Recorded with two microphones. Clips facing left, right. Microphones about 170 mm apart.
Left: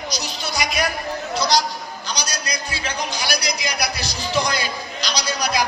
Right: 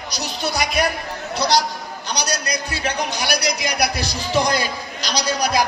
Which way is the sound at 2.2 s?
60° right (ahead or behind).